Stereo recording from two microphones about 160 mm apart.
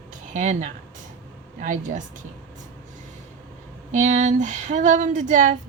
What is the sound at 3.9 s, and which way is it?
Speech, 50° right (ahead or behind).